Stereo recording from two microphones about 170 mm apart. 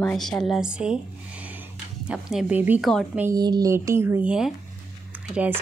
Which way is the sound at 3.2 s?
20° right (ahead or behind).